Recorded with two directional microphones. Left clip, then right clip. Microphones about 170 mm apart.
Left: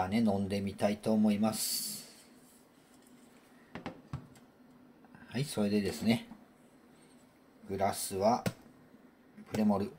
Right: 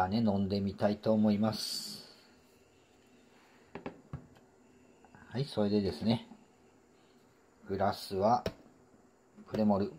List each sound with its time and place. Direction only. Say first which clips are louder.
0.0 s speech: right 1 dB; 25° right (ahead or behind)
5.3 s speech: right 1 dB; 15° right (ahead or behind)
7.6 s speech: even; 25° right (ahead or behind)
9.6 s speech: right 2 dB; 20° right (ahead or behind)